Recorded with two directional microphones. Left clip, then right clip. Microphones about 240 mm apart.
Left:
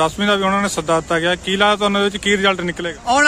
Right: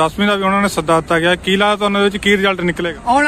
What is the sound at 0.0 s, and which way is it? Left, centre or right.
Speech, centre.